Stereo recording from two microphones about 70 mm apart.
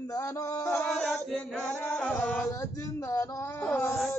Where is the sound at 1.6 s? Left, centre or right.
Centre.